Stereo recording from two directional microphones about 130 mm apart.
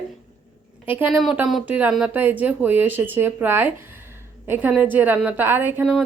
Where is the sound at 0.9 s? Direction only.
10° right (ahead or behind).